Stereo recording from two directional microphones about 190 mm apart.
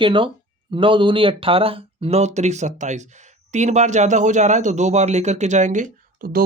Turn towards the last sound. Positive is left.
turn(degrees=-50)  # may be behind; listen again after turning